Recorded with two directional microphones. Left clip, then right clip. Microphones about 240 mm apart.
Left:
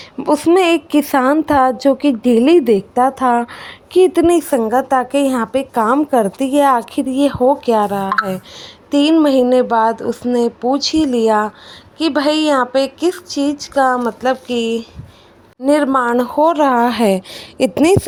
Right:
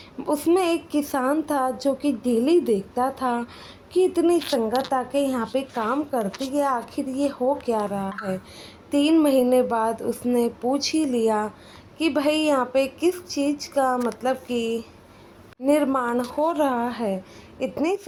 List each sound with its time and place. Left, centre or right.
0.2 s a woman's voice: left
4.5 s a woman's voice: left
16.7 s a woman's voice: left